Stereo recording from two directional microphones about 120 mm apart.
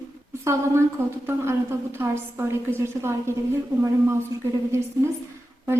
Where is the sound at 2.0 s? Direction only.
20° right (ahead or behind).